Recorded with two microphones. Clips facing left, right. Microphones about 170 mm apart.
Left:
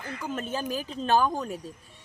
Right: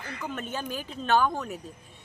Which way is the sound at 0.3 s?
30° left (ahead or behind).